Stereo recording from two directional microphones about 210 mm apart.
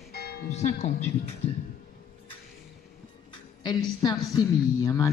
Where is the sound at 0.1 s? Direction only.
50° left (ahead or behind).